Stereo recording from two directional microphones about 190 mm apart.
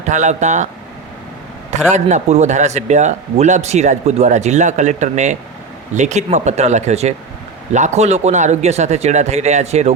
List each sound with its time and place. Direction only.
0.1 s a man's voice: 40° right (ahead or behind)
1.7 s a man's voice: 40° right (ahead or behind)